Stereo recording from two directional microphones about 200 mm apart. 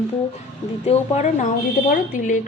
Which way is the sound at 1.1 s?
35° left (ahead or behind).